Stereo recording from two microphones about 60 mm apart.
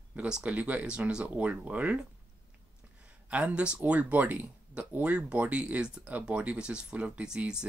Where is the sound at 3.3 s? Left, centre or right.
Right.